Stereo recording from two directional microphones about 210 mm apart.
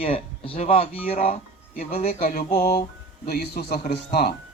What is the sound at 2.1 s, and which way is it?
Speech, 45° left (ahead or behind).